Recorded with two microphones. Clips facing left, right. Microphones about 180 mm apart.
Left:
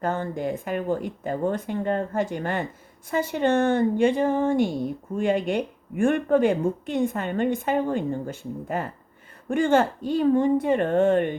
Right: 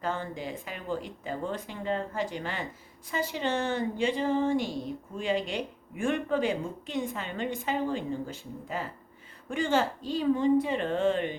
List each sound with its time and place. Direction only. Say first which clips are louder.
0.0 s speech: left 7 dB; 50° left (ahead or behind)